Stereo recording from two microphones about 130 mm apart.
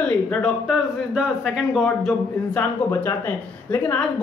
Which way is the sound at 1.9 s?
10° left (ahead or behind).